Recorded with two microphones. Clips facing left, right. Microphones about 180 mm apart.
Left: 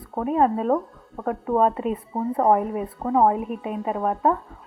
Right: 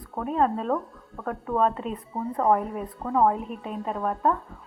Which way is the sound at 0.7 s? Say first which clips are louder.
Left 5 dB; 25° left (ahead or behind).